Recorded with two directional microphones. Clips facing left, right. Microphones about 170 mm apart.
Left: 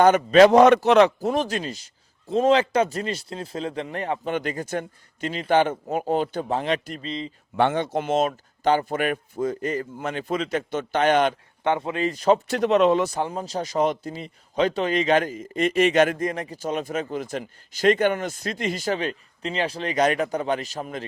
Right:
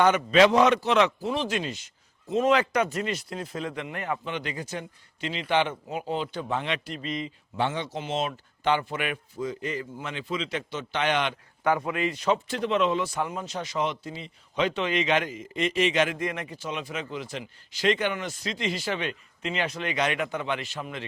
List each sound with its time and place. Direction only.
0.0 s speech: 45° left (ahead or behind); by 0.9 s 60° left (ahead or behind)
0.9 s speech: 40° left (ahead or behind)
4.3 s speech: 45° left (ahead or behind)
7.0 s speech: 30° left (ahead or behind)
7.5 s speech: 55° left (ahead or behind)
11.6 s speech: 25° left (ahead or behind)